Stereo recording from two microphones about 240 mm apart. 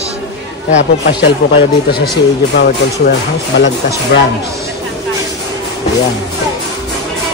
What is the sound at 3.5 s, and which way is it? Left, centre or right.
Speech, left.